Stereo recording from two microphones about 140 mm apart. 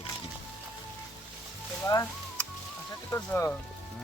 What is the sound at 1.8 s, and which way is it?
Speech, 25° left (ahead or behind).